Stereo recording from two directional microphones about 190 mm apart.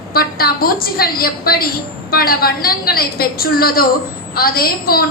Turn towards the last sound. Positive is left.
turn(degrees=50)  # may be behind; listen again after turning